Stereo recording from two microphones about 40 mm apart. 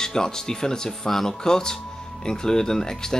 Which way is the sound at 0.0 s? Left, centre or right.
Centre.